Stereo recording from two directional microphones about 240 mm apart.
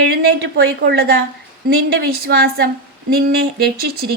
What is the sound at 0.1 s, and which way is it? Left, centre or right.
Speech, right.